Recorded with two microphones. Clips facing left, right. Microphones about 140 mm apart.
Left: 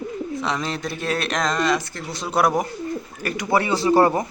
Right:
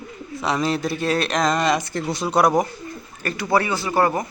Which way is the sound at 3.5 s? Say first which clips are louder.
Left 3 dB; 25° left (ahead or behind).